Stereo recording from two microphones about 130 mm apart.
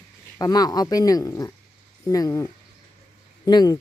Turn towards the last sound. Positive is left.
turn(degrees=30)  # may be behind; listen again after turning